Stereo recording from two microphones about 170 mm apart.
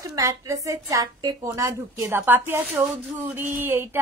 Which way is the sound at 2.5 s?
15° right (ahead or behind).